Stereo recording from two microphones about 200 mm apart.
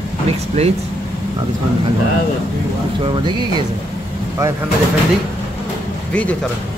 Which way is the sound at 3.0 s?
25° right (ahead or behind).